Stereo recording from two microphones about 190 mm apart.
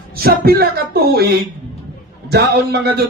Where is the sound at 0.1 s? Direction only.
55° right (ahead or behind).